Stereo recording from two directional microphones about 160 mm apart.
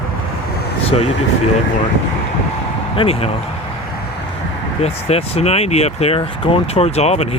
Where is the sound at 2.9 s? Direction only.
35° left (ahead or behind).